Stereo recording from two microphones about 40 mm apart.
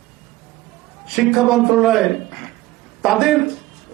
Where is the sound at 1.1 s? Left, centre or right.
Centre.